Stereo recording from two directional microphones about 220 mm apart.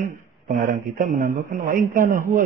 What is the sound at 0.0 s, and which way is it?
Speech, 35° right (ahead or behind).